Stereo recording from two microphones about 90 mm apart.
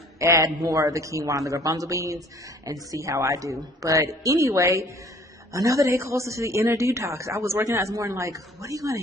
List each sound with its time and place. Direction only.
0.2 s speech: 35° right (ahead or behind)